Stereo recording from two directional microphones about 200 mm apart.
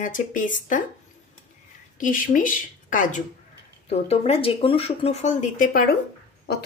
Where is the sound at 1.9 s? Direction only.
40° left (ahead or behind).